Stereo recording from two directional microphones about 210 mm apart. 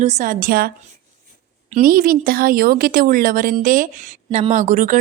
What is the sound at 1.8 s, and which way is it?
A woman's voice, 40° right (ahead or behind).